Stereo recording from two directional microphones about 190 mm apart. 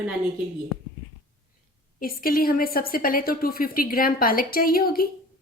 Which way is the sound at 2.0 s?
50° left (ahead or behind).